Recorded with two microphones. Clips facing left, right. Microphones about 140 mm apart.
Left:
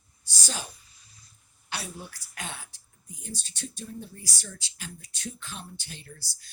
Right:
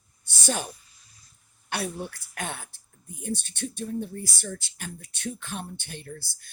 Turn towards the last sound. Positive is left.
turn(degrees=-55)  # may be behind; listen again after turning